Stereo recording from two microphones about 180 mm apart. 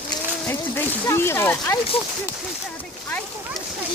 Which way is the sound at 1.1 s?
15° left (ahead or behind).